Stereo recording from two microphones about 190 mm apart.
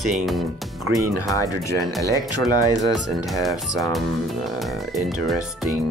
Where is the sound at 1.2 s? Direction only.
15° left (ahead or behind).